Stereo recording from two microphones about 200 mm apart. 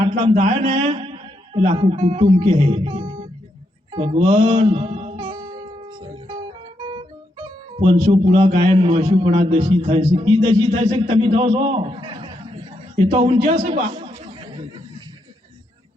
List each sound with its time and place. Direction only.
0.0 s a man's voice: 30° right (ahead or behind)
3.9 s music: 30° right (ahead or behind)
6.8 s a man's voice: 25° right (ahead or behind)
13.1 s chatter: 30° right (ahead or behind)